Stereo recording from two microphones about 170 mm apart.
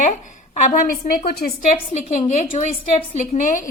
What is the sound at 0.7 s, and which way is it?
Speech, 55° left (ahead or behind).